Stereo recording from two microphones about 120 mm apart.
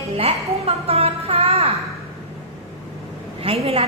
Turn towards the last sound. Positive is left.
turn(degrees=-55)  # may be behind; listen again after turning